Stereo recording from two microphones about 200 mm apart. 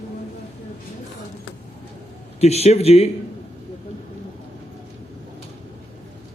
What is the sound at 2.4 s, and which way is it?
Speech, 30° left (ahead or behind).